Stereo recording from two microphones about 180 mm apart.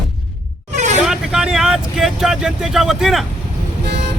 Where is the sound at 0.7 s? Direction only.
40° right (ahead or behind).